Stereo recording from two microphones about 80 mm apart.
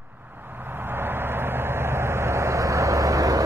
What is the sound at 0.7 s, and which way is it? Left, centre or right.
Vehicle, right.